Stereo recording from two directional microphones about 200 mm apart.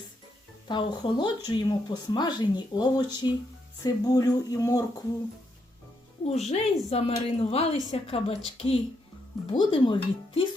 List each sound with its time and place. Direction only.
0.7 s speech: 25° left (ahead or behind)
6.2 s a woman's voice: 35° left (ahead or behind)